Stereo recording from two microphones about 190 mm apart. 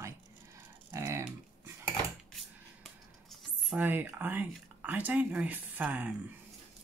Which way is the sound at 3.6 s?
5° right (ahead or behind).